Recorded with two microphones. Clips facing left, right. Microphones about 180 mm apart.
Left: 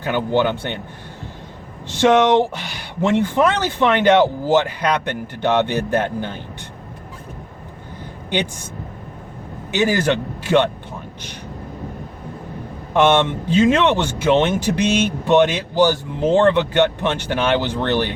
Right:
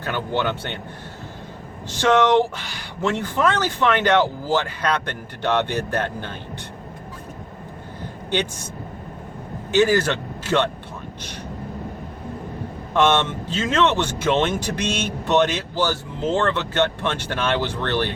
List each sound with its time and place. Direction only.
0.0 s speech: 15° left (ahead or behind)
2.0 s speech: 20° left (ahead or behind)
9.7 s speech: 15° left (ahead or behind)
12.9 s speech: 15° left (ahead or behind)